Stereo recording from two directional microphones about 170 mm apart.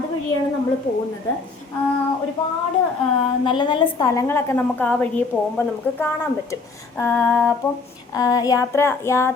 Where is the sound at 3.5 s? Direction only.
30° left (ahead or behind); by 6.5 s 15° left (ahead or behind).